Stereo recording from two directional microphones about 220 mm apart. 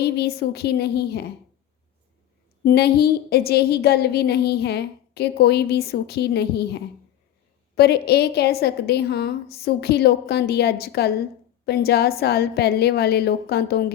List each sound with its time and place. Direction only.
0.0 s a woman's voice: 45° left (ahead or behind)
2.6 s a woman's voice: 45° left (ahead or behind)